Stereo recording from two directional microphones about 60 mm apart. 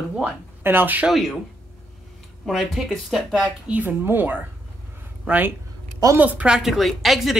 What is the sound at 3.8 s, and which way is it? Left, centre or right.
Speech, right.